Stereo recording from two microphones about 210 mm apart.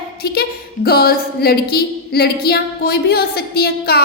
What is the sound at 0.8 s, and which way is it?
A woman's voice, 45° left (ahead or behind).